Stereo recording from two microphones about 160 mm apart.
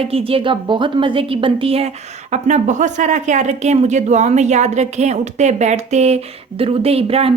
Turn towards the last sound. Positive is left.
turn(degrees=-40)  # may be behind; listen again after turning